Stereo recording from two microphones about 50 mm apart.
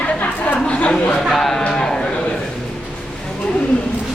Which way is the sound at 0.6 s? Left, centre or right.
Left.